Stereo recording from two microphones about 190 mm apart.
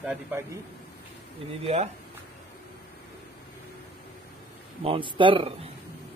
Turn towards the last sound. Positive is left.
turn(degrees=-30)  # may be behind; listen again after turning